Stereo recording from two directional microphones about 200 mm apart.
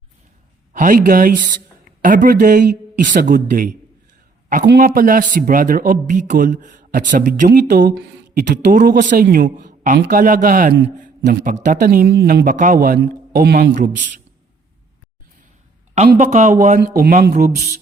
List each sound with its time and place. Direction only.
0.7 s a man's voice: 40° right (ahead or behind)
4.6 s speech: 55° right (ahead or behind)
16.1 s a man's voice: 40° right (ahead or behind)
16.8 s speech: 45° right (ahead or behind)